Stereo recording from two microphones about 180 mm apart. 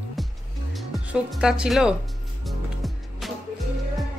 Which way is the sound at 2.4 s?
Centre (ahead or behind).